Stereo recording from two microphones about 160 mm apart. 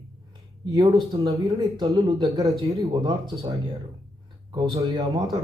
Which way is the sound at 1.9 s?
20° right (ahead or behind).